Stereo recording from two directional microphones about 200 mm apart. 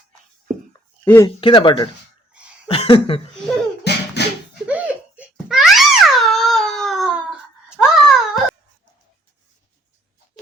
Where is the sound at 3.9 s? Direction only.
55° left (ahead or behind).